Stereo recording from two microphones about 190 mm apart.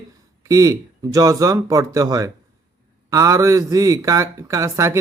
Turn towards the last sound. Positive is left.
turn(degrees=-15)  # may be behind; listen again after turning